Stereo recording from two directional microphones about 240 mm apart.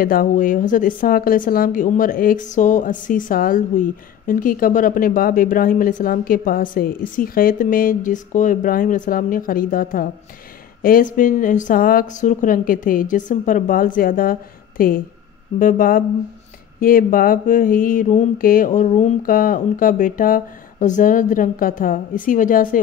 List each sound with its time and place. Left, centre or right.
0.0 s a woman's voice: left